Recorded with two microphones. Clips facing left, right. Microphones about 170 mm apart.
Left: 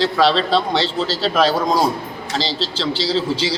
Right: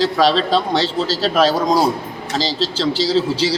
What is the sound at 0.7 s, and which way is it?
Speech, 40° right (ahead or behind).